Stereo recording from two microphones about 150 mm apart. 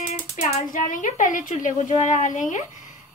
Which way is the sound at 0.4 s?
55° left (ahead or behind).